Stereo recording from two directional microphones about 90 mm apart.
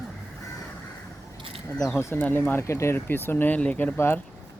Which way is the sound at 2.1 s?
20° left (ahead or behind).